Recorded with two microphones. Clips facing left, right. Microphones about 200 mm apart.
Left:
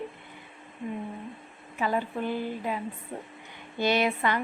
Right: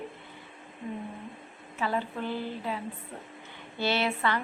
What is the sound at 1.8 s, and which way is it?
A woman's voice, 15° left (ahead or behind).